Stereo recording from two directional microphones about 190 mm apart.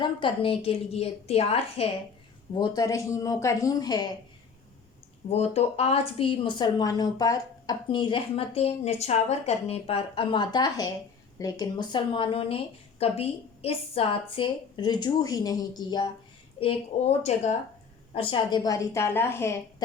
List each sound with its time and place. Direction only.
0.0 s a woman's voice: 25° left (ahead or behind)
5.3 s a woman's voice: 35° left (ahead or behind)
16.6 s a woman's voice: 35° left (ahead or behind); by 19.5 s 15° left (ahead or behind)